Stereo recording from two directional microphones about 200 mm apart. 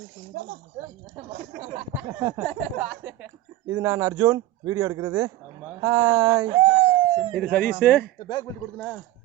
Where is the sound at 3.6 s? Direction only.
15° right (ahead or behind).